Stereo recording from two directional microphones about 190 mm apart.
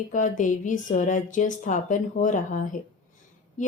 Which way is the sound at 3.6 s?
40° left (ahead or behind).